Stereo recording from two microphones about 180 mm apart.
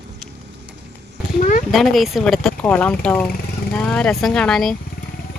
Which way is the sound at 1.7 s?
Centre (ahead or behind).